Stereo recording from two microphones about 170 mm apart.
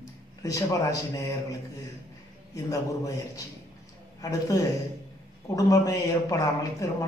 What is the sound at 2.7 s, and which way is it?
A man's voice, 20° left (ahead or behind).